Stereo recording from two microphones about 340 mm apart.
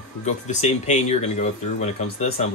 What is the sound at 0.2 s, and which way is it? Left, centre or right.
Speech, centre.